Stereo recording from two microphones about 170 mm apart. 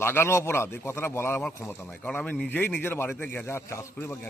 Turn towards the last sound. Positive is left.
turn(degrees=15)  # may be behind; listen again after turning